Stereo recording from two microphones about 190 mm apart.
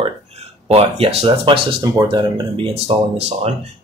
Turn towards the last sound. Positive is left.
turn(degrees=-30)  # may be behind; listen again after turning